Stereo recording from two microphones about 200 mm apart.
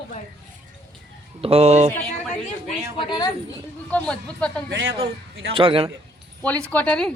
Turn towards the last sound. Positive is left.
turn(degrees=5)  # may be behind; listen again after turning